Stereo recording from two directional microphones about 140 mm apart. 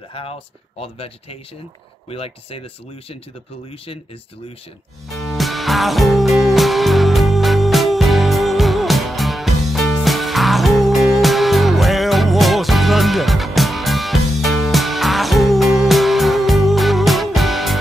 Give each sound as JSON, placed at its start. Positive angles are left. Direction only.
{"t": 0.1, "sound": "speech", "side_deg": 40}
{"t": 5.1, "sound": "music", "side_deg": 0}